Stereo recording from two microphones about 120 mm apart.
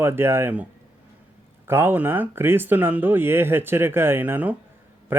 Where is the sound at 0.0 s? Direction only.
20° right (ahead or behind).